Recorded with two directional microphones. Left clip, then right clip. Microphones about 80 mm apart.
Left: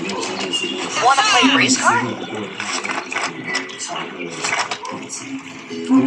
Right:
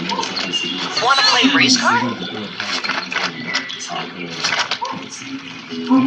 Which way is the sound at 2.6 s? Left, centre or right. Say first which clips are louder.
Right 3 dB; right.